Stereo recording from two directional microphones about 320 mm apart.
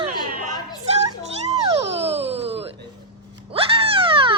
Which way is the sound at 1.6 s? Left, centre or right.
Centre.